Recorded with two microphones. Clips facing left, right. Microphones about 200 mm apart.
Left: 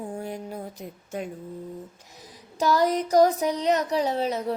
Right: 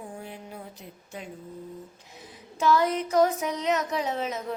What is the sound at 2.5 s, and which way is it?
Speech, 40° left (ahead or behind).